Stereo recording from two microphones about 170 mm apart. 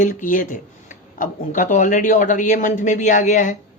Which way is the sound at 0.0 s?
50° left (ahead or behind).